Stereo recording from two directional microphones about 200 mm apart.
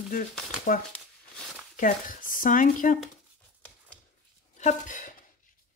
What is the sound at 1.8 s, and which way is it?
Speech, 45° left (ahead or behind).